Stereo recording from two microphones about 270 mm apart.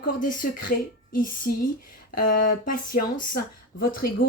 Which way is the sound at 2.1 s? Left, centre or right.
Left.